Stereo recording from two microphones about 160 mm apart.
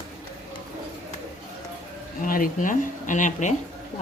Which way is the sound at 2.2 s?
60° left (ahead or behind).